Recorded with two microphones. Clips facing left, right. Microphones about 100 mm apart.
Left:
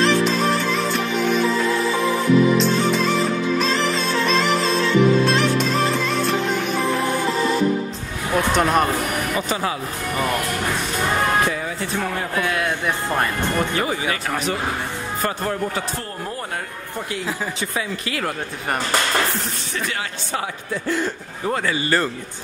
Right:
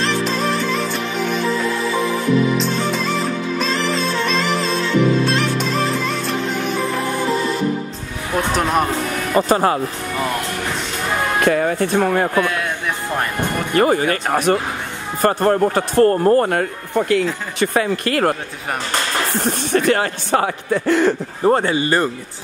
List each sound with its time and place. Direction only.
0.0 s music: centre (ahead or behind)
2.5 s music: centre (ahead or behind)
8.5 s speech: centre (ahead or behind)
9.3 s a man's voice: 40° right (ahead or behind)
11.4 s speech: 55° right (ahead or behind)
12.4 s speech: centre (ahead or behind)
13.7 s a man's voice: 50° right (ahead or behind)
19.3 s speech: 50° right (ahead or behind); by 21.1 s 70° right (ahead or behind)
21.5 s speech: 35° right (ahead or behind)